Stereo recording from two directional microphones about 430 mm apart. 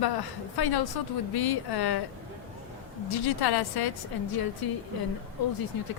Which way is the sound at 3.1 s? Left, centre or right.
Left.